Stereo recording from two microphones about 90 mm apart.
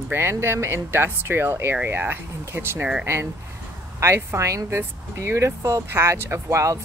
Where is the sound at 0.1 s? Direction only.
25° right (ahead or behind).